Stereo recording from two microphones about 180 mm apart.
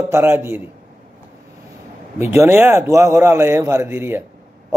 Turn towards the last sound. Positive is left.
turn(degrees=-15)  # may be behind; listen again after turning